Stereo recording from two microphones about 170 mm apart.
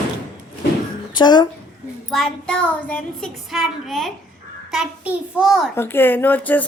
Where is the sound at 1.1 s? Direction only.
25° left (ahead or behind).